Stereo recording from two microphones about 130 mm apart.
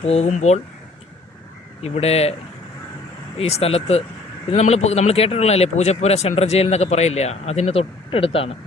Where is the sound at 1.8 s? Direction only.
55° left (ahead or behind).